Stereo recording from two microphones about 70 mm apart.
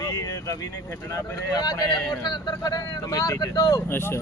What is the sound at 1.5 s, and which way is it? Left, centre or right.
A man's voice, left.